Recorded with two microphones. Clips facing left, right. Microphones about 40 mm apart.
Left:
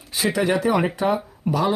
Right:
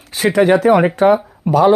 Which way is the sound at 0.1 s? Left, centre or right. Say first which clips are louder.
Right 9 dB; right.